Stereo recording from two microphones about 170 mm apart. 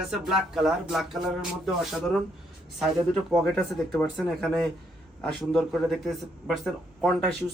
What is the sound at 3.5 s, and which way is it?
Speech, 10° left (ahead or behind).